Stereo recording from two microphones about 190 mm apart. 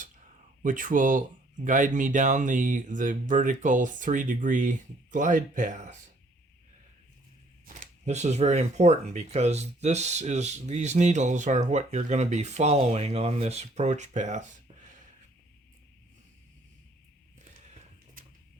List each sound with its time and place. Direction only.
0.6 s speech: 45° right (ahead or behind)
7.6 s speech: 40° right (ahead or behind)